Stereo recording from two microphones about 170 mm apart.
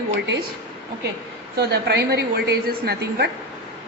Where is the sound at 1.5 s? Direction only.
75° right (ahead or behind).